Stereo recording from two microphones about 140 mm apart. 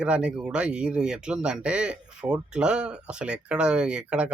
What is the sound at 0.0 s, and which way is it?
Speech, 10° right (ahead or behind).